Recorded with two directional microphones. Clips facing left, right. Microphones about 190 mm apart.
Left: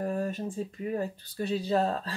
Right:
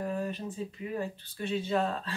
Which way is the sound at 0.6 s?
45° left (ahead or behind).